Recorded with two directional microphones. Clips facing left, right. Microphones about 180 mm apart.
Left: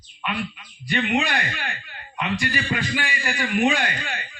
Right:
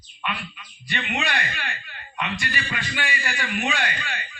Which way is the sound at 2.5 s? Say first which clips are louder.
Left 5 dB; 35° left (ahead or behind).